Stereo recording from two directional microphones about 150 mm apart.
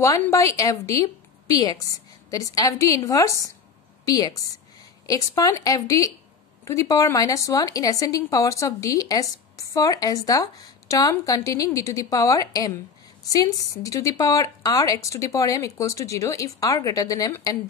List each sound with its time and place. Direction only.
0.0 s speech: 20° left (ahead or behind)